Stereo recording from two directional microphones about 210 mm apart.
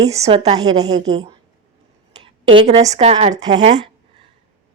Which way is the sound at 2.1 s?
25° right (ahead or behind).